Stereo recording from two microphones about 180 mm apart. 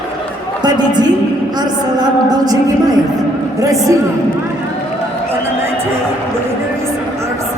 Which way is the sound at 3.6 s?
20° right (ahead or behind).